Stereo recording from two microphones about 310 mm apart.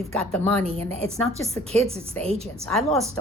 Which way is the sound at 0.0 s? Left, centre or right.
Centre.